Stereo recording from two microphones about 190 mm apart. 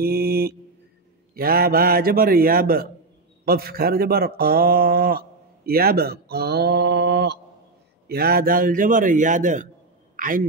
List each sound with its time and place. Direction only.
0.0 s mantra: 55° right (ahead or behind)
1.3 s speech: 50° right (ahead or behind)
10.1 s a sound: 45° right (ahead or behind)